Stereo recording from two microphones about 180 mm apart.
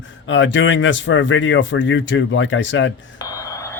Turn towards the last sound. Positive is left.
turn(degrees=15)  # may be behind; listen again after turning